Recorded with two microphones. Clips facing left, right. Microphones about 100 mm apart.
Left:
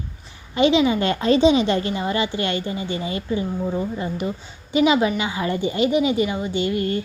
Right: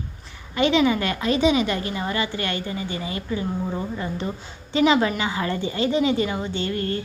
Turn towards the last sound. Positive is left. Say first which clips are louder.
# left 4 dB
turn(degrees=15)  # may be behind; listen again after turning